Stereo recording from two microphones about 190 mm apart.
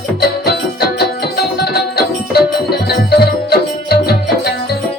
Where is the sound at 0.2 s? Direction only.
55° left (ahead or behind).